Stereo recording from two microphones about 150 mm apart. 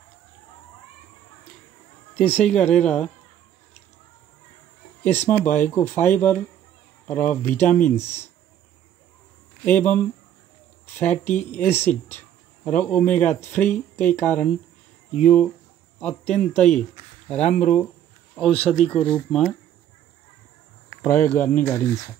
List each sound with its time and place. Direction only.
2.3 s speech: 10° left (ahead or behind)
5.0 s speech: 15° left (ahead or behind)
9.7 s speech: 10° left (ahead or behind)
11.0 s speech: 10° left (ahead or behind)
20.9 s speech: 15° left (ahead or behind)